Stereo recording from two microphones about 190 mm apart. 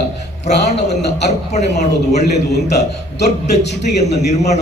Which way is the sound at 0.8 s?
60° left (ahead or behind).